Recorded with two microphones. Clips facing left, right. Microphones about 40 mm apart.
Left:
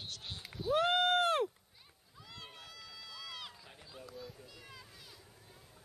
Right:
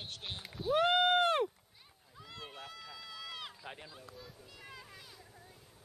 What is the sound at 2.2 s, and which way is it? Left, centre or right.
Run, centre.